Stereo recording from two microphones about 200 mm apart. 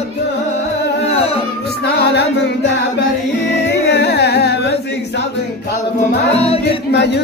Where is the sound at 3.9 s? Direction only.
55° left (ahead or behind).